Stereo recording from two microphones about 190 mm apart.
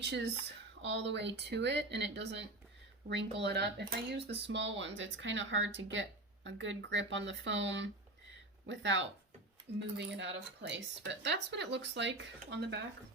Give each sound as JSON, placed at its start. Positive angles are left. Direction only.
{"t": 0.0, "sound": "speech", "side_deg": -65}